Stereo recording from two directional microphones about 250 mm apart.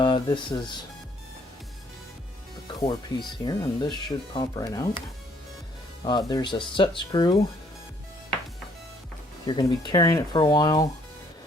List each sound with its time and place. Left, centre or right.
0.0 s speech: centre
2.8 s speech: centre
6.1 s speech: centre
9.5 s speech: centre